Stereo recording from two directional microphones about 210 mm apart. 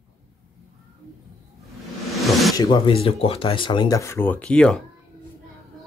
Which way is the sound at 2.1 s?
Centre (ahead or behind).